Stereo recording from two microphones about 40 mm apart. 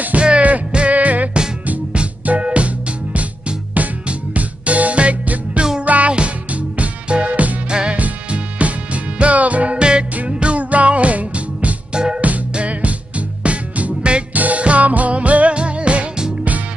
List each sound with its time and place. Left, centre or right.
0.2 s music: right
0.8 s music: right
6.8 s music: right
7.2 s music: right
9.8 s music: right
10.1 s music: right
11.9 s music: right
12.2 s music: right